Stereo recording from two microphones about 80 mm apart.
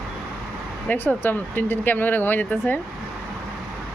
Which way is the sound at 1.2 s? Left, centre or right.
Left.